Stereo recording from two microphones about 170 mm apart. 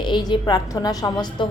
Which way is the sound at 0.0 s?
25° left (ahead or behind).